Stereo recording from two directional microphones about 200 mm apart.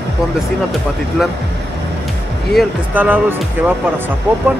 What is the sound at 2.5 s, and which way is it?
Speech, 10° right (ahead or behind).